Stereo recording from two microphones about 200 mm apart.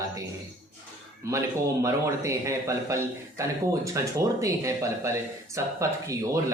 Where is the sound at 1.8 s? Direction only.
15° right (ahead or behind).